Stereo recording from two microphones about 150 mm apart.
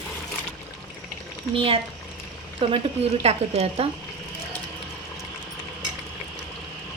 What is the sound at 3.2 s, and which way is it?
Speech, 45° right (ahead or behind).